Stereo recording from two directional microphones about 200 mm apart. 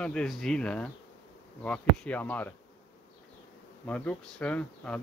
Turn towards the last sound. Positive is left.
turn(degrees=5)  # may be behind; listen again after turning